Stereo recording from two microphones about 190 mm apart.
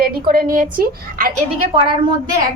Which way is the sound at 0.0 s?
50° right (ahead or behind).